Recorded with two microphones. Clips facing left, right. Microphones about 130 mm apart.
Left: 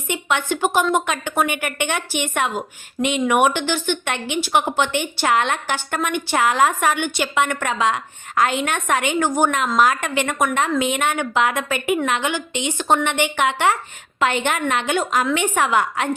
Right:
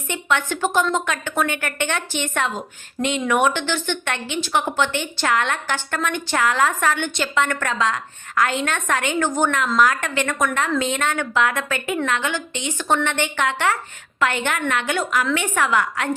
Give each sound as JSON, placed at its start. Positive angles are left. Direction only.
{"t": 0.1, "sound": "a woman's voice", "side_deg": 15}